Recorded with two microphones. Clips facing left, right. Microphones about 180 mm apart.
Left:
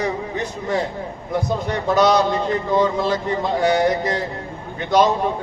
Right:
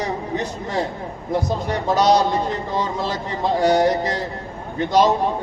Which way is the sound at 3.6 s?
55° left (ahead or behind).